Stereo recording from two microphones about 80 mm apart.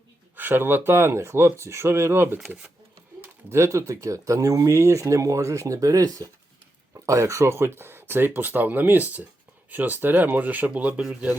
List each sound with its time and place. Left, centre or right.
0.3 s speech: right